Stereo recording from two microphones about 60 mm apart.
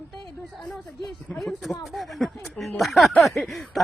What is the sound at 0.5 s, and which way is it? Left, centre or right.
Speech, centre.